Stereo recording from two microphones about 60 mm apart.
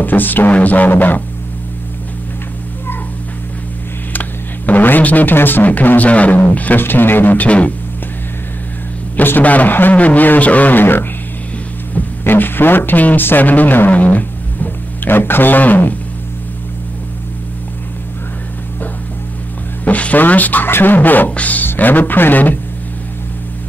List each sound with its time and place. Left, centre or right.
0.0 s speech: left
4.1 s speech: left
9.1 s speech: left
19.8 s speech: left